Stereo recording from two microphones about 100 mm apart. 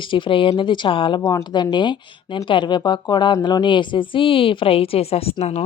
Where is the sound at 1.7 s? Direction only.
50° left (ahead or behind).